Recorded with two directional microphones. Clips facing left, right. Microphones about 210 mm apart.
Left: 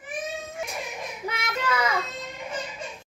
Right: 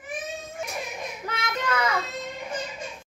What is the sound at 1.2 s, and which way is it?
Child singing, 10° left (ahead or behind).